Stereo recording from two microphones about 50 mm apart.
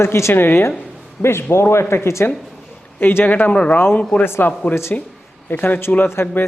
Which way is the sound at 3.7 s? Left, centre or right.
Left.